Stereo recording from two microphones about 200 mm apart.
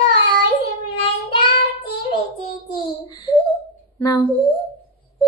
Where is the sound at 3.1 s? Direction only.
20° left (ahead or behind).